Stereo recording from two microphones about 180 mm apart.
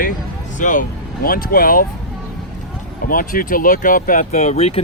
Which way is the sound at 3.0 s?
50° left (ahead or behind).